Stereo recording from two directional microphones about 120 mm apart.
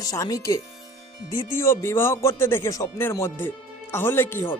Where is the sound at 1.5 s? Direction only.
20° left (ahead or behind).